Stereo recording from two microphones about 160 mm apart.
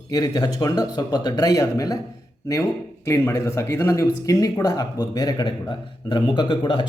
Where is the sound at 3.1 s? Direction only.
15° left (ahead or behind).